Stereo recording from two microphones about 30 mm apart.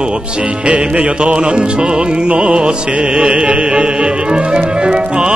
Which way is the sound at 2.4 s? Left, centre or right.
Right.